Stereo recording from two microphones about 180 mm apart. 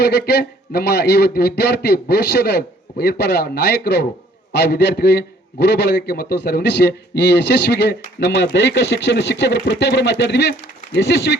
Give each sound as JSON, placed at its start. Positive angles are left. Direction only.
{"t": 0.0, "sound": "a man's voice", "side_deg": 65}